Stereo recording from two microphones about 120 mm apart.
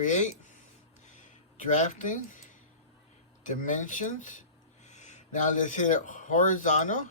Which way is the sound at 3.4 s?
90° left.